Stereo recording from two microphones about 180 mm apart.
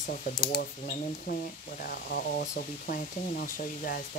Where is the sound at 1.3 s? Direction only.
60° left (ahead or behind).